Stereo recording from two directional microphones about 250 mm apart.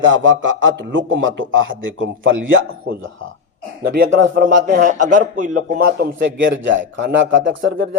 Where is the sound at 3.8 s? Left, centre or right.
Right.